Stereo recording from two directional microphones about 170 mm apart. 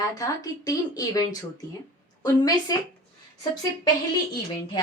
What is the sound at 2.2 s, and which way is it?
Speech, 20° left (ahead or behind).